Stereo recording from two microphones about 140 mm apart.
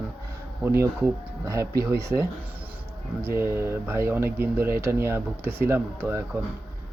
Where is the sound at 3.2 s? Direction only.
20° right (ahead or behind).